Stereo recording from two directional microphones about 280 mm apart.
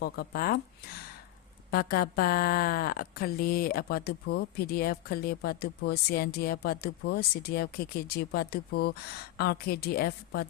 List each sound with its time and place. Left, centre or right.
0.0 s speech: left